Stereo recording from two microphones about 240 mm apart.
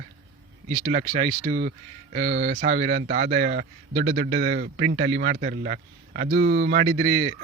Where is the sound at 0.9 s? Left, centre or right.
Right.